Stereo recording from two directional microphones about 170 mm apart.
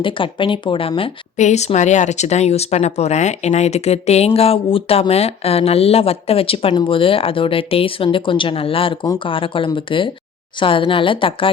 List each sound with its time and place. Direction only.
0.0 s speech: 30° left (ahead or behind)
1.4 s speech: 40° left (ahead or behind)